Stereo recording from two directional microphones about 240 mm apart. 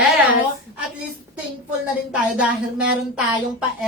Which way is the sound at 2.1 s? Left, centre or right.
Centre.